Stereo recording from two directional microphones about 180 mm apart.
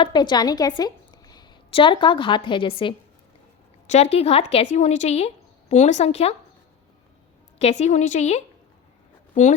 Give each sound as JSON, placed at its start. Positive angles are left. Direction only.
{"t": 0.0, "sound": "a woman's voice", "side_deg": 25}
{"t": 7.6, "sound": "speech", "side_deg": 40}